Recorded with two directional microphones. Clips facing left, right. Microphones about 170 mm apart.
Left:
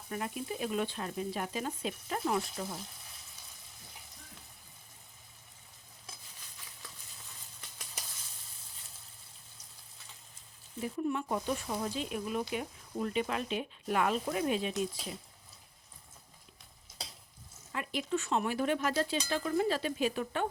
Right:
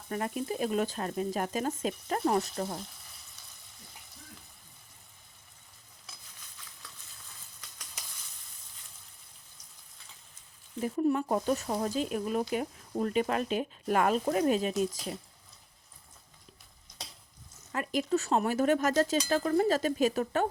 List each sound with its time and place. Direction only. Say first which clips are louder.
0.1 s speech: right 4 dB; 45° right (ahead or behind)
7.6 s sizzle: left 2 dB; 25° left (ahead or behind)
10.8 s speech: right 6 dB; 45° right (ahead or behind)
17.7 s speech: right 5 dB; 45° right (ahead or behind)